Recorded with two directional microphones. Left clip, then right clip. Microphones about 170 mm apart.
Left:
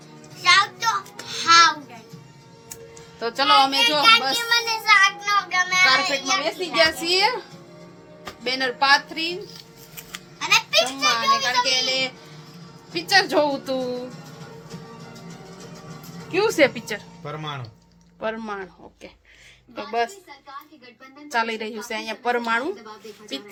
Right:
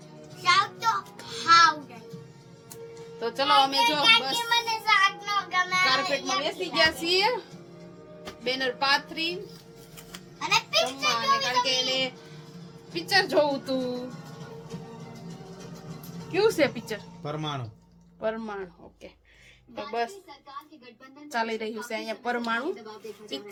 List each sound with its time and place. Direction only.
0.4 s music: 10° right (ahead or behind)
3.2 s a woman's voice: 25° left (ahead or behind)
4.4 s child singing: 10° right (ahead or behind)
5.9 s a woman's voice: 30° left (ahead or behind)
8.4 s a woman's voice: 30° left (ahead or behind)
10.4 s children playing: 10° right (ahead or behind)
11.1 s a woman's voice: 30° left (ahead or behind)
16.3 s a woman's voice: 20° left (ahead or behind)
17.2 s speech: 90° right
18.2 s a woman's voice: 20° left (ahead or behind)
21.2 s a woman's voice: 25° left (ahead or behind)